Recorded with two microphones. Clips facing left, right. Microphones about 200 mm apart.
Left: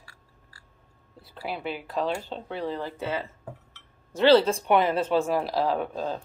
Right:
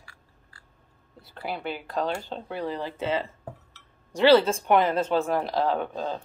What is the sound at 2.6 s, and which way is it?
Speech, 15° right (ahead or behind).